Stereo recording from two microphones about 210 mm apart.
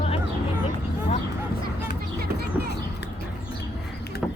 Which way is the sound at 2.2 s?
50° right (ahead or behind).